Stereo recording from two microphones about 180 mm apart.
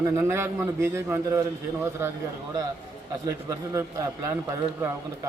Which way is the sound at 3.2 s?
15° right (ahead or behind).